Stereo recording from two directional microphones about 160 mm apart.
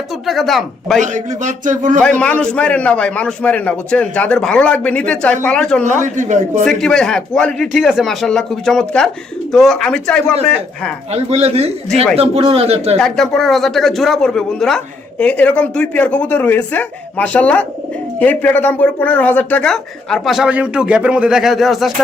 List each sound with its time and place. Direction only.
0.3 s speech: centre (ahead or behind)
1.0 s a man's voice: 50° right (ahead or behind)
2.0 s a man's voice: 5° left (ahead or behind)
5.8 s a man's voice: 50° right (ahead or behind)
6.7 s speech: 5° left (ahead or behind)
11.1 s speech: 40° right (ahead or behind)
13.0 s a man's voice: centre (ahead or behind)